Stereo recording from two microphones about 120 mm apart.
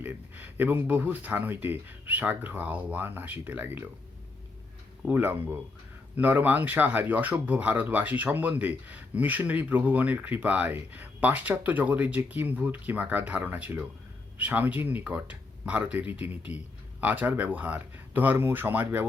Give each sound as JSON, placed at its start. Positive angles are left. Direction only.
{"t": 0.0, "sound": "speech", "side_deg": -15}
{"t": 5.0, "sound": "speech", "side_deg": -15}